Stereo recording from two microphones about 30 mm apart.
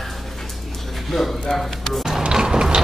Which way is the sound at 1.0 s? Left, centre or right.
Centre.